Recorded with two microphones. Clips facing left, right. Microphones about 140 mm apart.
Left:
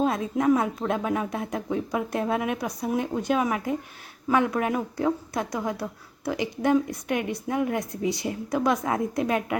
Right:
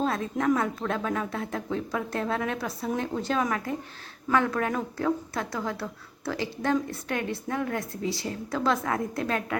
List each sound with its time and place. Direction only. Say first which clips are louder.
0.0 s a woman's voice: left 3 dB; 15° left (ahead or behind)